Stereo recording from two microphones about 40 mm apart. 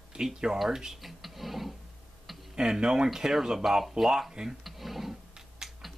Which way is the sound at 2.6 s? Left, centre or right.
Centre.